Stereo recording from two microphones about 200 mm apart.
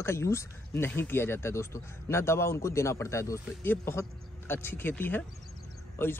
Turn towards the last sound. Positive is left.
turn(degrees=10)  # may be behind; listen again after turning